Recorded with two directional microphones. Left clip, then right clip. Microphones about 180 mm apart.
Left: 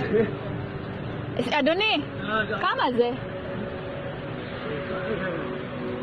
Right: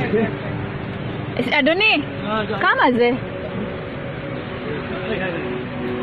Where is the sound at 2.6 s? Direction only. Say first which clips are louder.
Right 9 dB; 20° right (ahead or behind).